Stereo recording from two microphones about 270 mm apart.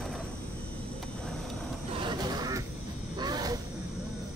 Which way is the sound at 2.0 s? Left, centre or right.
Centre.